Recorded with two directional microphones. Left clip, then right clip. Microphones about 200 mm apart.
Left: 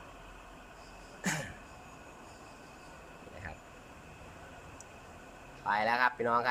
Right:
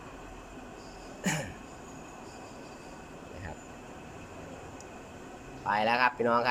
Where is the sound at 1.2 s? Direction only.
5° right (ahead or behind).